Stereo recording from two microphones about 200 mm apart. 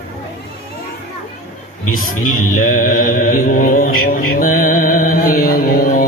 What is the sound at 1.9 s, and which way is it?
Music, 45° left (ahead or behind).